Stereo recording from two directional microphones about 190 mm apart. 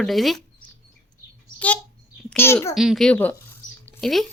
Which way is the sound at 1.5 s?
10° left (ahead or behind).